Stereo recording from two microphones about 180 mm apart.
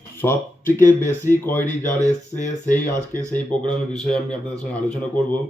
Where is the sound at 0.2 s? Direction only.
15° left (ahead or behind).